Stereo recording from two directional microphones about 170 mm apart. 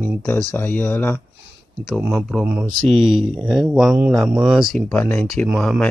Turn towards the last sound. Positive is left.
turn(degrees=0)  # may be behind; listen again after turning